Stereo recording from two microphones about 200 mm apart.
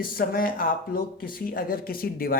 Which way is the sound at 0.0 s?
45° left (ahead or behind).